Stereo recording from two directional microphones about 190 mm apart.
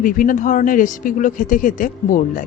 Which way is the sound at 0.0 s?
45° left (ahead or behind).